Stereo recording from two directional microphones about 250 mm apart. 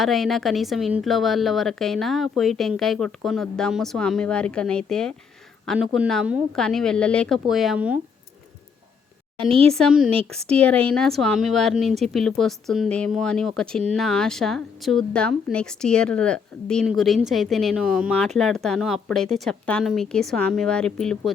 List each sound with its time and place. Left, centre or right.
0.0 s speech: centre
9.4 s speech: right
9.7 s speech: centre